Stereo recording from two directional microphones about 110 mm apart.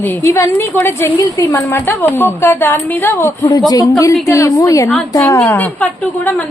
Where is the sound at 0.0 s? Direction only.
25° left (ahead or behind).